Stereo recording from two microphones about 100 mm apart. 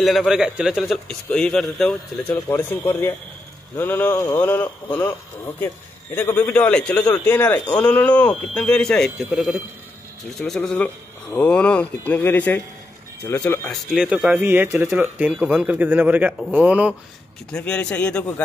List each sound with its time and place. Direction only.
0.0 s speech: centre (ahead or behind)
1.0 s speech: 5° left (ahead or behind)
2.2 s a man's voice: 20° left (ahead or behind)
6.1 s a man's voice: 20° left (ahead or behind)
9.2 s speech: 5° right (ahead or behind)
10.4 s speech: 5° left (ahead or behind)
10.8 s a man's voice: 20° left (ahead or behind)
13.9 s a man's voice: 5° right (ahead or behind)
14.4 s a man's voice: 20° right (ahead or behind)
17.5 s speech: 10° left (ahead or behind)